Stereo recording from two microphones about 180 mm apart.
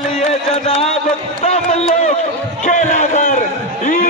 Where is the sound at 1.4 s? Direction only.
40° left (ahead or behind).